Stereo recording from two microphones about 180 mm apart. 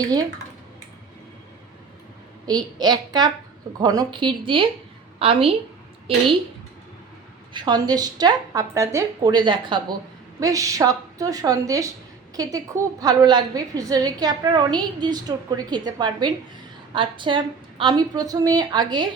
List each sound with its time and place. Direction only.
2.5 s a woman's voice: 20° right (ahead or behind)
7.5 s a woman's voice: 25° right (ahead or behind)